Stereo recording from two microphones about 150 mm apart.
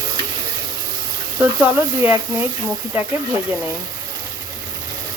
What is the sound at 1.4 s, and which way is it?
Speech, 10° right (ahead or behind).